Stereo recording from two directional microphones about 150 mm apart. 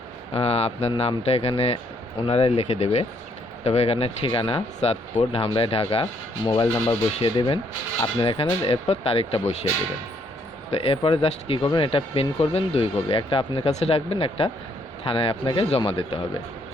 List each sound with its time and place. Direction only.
0.3 s speech: 40° left (ahead or behind)
10.7 s speech: 40° left (ahead or behind)